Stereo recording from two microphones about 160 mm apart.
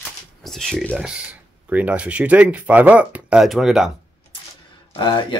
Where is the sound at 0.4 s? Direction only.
Centre (ahead or behind).